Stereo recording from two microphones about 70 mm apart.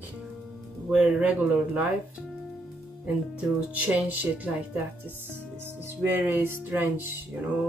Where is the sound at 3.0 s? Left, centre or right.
Centre.